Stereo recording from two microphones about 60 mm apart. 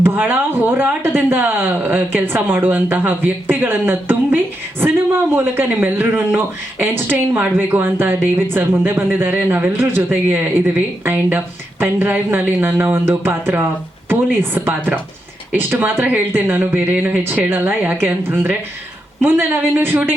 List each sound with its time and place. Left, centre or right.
0.0 s speech: right
16.9 s speech: right
17.5 s speech: right